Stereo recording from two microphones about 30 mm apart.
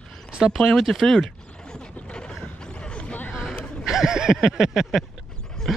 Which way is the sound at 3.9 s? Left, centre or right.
Centre.